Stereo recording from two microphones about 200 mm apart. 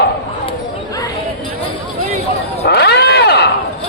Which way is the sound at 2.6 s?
55° left (ahead or behind).